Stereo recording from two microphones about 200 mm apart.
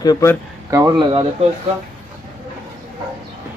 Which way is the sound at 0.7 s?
20° right (ahead or behind).